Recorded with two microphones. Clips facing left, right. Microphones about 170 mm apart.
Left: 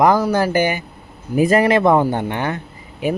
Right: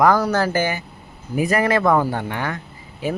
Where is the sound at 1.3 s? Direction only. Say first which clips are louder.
Left 5 dB; 25° left (ahead or behind).